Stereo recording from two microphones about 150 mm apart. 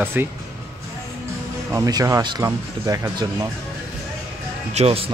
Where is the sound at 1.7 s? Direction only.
25° right (ahead or behind).